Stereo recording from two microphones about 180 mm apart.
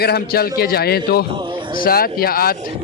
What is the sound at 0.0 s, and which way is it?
A man's voice, 60° left (ahead or behind).